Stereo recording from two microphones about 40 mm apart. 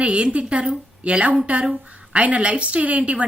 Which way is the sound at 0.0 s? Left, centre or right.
Right.